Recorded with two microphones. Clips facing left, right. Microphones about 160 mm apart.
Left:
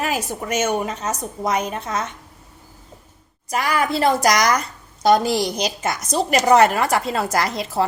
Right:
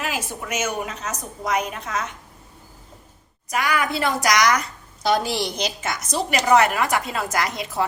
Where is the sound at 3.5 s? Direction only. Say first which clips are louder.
Left 2 dB; 35° left (ahead or behind).